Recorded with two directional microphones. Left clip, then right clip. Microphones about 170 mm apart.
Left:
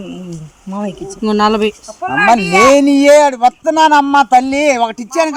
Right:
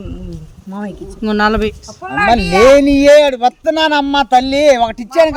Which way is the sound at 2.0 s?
55° right (ahead or behind).